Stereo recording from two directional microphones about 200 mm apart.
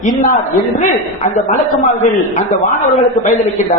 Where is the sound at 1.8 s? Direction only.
35° left (ahead or behind).